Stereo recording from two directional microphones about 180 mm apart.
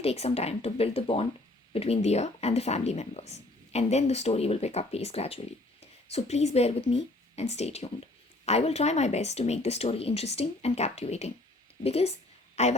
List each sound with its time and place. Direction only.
0.0 s a woman's voice: 35° left (ahead or behind)